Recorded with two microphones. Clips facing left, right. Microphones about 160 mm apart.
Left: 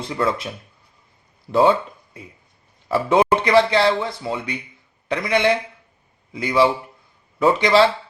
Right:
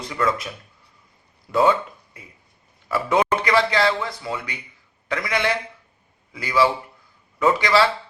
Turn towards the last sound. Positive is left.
turn(degrees=25)  # may be behind; listen again after turning